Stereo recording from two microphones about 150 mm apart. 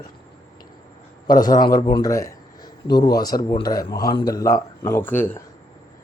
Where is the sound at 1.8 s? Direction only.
25° left (ahead or behind).